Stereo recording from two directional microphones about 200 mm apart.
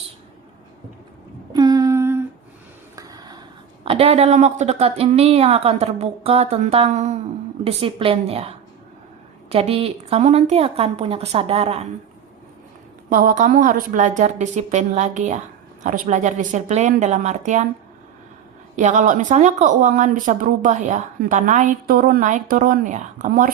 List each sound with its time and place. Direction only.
1.5 s humming: 20° right (ahead or behind)
2.9 s a sound: 15° right (ahead or behind)
3.8 s a woman's voice: 30° right (ahead or behind)
13.1 s speech: 40° right (ahead or behind)
18.8 s speech: 35° right (ahead or behind)